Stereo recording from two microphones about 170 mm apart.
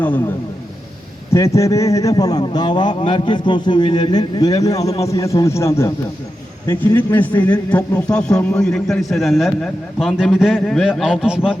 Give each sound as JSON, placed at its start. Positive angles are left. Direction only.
{"t": 0.0, "sound": "a man's voice", "side_deg": 10}